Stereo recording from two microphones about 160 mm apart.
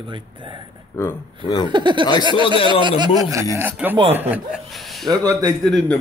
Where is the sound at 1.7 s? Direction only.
30° right (ahead or behind).